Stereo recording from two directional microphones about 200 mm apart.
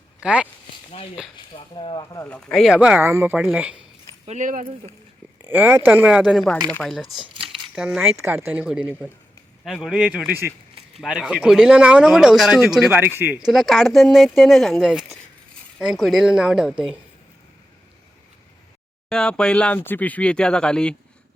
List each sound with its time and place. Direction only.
0.2 s speech: 5° right (ahead or behind)
1.5 s speech: 25° left (ahead or behind)
2.2 s speech: 5° left (ahead or behind)
4.3 s speech: 40° right (ahead or behind)
5.5 s speech: 10° right (ahead or behind)
13.5 s speech: centre (ahead or behind)
19.0 s speech: 5° left (ahead or behind)